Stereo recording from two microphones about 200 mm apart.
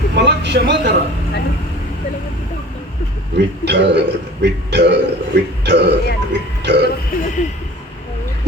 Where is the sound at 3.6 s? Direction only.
60° right (ahead or behind).